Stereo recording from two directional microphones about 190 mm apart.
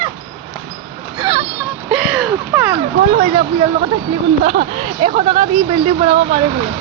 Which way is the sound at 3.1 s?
35° right (ahead or behind).